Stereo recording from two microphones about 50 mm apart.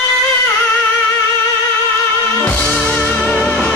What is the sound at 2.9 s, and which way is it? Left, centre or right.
Music, left.